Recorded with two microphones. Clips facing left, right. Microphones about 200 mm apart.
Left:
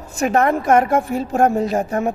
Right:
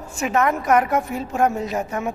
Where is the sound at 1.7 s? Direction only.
45° left (ahead or behind).